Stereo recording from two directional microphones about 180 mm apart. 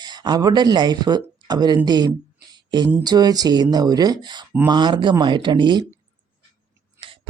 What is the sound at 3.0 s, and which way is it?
Speech, 20° right (ahead or behind).